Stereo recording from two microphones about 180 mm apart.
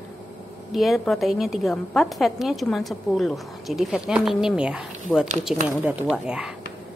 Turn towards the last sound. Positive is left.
turn(degrees=-5)  # may be behind; listen again after turning